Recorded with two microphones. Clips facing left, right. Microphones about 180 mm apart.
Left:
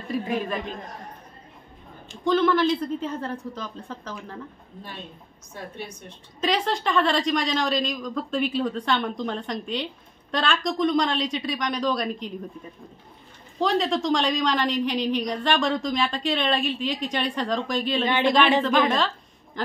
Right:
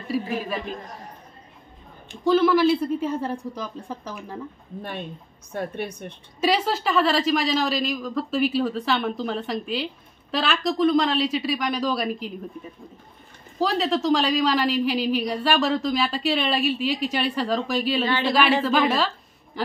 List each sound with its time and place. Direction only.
2.2 s a woman's voice: 10° right (ahead or behind)
5.5 s a woman's voice: 60° right (ahead or behind)
6.4 s a woman's voice: 5° right (ahead or behind)
13.6 s a woman's voice: 5° right (ahead or behind)
19.6 s a sound: 10° right (ahead or behind)